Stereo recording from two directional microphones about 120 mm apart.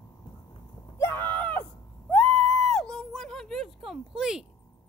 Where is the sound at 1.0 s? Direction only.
15° left (ahead or behind); by 4.4 s 5° right (ahead or behind).